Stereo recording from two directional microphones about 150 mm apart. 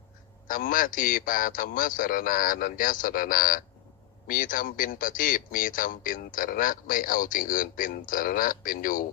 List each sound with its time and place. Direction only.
0.4 s speech: 65° left (ahead or behind)